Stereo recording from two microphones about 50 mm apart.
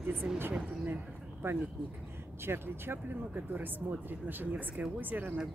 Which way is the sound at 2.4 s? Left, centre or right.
Right.